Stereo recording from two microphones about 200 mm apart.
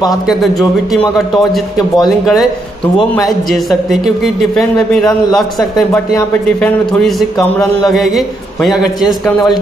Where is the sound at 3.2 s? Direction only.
Centre (ahead or behind).